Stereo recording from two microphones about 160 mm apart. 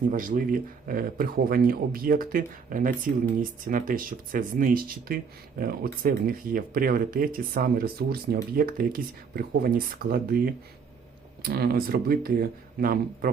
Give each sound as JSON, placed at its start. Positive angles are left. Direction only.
{"t": 0.1, "sound": "speech", "side_deg": -55}